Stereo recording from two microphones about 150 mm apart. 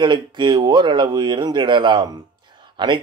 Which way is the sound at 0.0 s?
30° right (ahead or behind).